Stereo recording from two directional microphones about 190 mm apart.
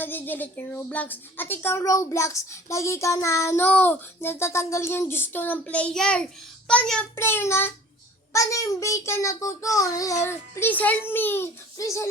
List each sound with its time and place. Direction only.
0.0 s speech: 10° left (ahead or behind)